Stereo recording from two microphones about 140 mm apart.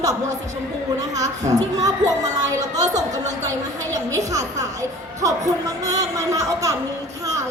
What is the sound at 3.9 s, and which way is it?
Speech, 25° right (ahead or behind).